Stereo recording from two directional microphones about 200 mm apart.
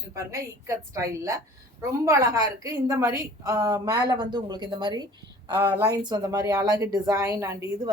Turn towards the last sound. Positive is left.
turn(degrees=-15)  # may be behind; listen again after turning